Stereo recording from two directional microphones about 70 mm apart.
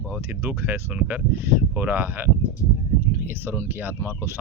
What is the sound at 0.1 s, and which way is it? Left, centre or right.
Speech, right.